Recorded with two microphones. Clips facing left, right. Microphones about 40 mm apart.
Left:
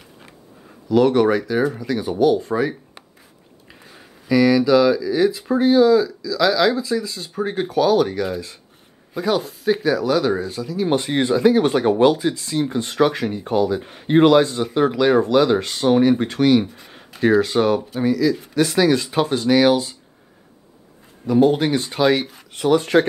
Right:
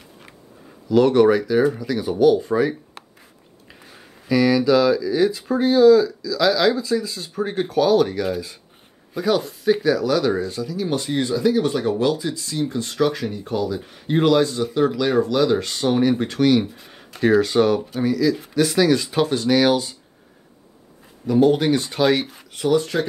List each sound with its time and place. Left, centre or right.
0.8 s speech: centre
10.9 s speech: left; by 20.0 s centre
21.3 s speech: centre
22.9 s speech: left